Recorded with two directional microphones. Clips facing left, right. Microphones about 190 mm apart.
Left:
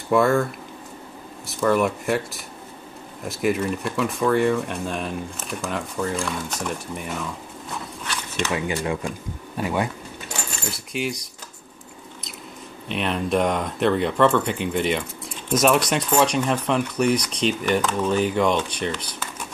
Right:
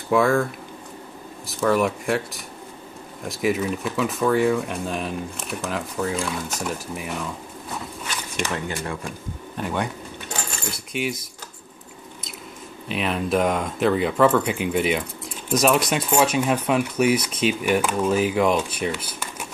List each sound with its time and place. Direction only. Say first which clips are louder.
0.1 s speech: even; centre (ahead or behind)
1.5 s speech: even; centre (ahead or behind)
8.5 s speech: left 4 dB; 15° left (ahead or behind)
9.6 s speech: left 2 dB; 5° left (ahead or behind)
12.8 s speech: even; 5° right (ahead or behind)